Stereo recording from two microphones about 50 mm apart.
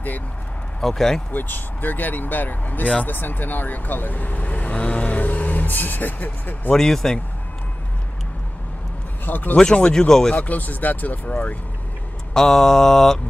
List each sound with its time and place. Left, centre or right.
0.7 s mantra: centre
1.3 s speech: left
6.7 s mantra: centre
9.2 s speech: left
9.6 s mantra: centre
10.3 s speech: left
12.4 s mantra: centre